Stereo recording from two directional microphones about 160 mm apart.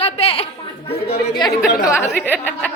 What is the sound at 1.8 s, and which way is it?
Speech, 20° left (ahead or behind).